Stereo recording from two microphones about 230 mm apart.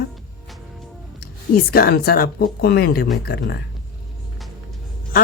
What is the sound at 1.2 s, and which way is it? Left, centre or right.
Speech, left.